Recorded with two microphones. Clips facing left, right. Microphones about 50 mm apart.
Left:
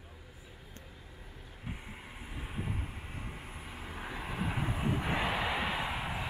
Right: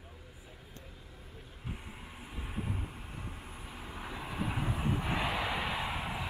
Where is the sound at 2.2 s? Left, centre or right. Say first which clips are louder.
Right 1 dB; centre.